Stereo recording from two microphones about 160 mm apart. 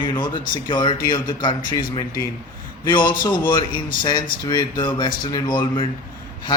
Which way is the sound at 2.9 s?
30° left (ahead or behind).